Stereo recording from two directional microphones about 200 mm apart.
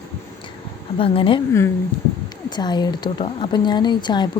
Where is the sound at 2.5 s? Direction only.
20° left (ahead or behind).